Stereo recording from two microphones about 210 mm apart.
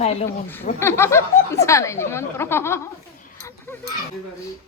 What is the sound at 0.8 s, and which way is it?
Speech, 10° left (ahead or behind).